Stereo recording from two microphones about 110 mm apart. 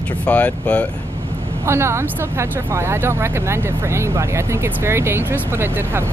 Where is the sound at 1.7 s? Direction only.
25° right (ahead or behind).